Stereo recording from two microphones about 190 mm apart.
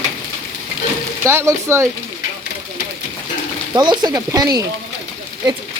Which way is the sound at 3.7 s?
20° right (ahead or behind).